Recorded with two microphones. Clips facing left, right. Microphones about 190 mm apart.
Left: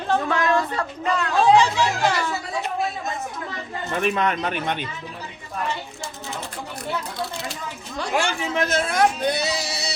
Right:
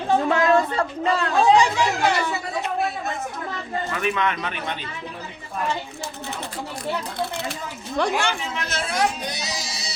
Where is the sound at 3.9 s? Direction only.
35° left (ahead or behind).